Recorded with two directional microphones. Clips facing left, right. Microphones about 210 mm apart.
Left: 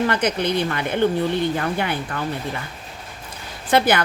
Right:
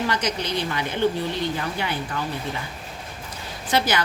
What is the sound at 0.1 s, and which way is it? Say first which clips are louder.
A woman's voice: left 5 dB; 55° left (ahead or behind).